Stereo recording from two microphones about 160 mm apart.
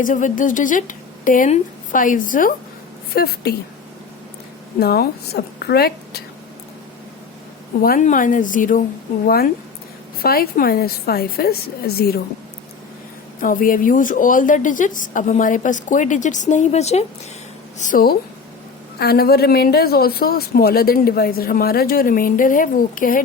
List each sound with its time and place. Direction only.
0.0 s speech: 55° left (ahead or behind)
3.2 s a woman's voice: 85° left
4.8 s a woman's voice: 85° left
7.8 s speech: 65° left (ahead or behind)
8.0 s speech: 55° left (ahead or behind)
9.2 s speech: 70° left (ahead or behind)
13.4 s a woman's voice: 60° left (ahead or behind); by 17.1 s 45° left (ahead or behind)
17.7 s speech: 55° left (ahead or behind)